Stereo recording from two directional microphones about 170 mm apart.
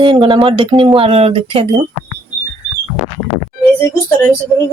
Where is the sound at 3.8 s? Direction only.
15° left (ahead or behind).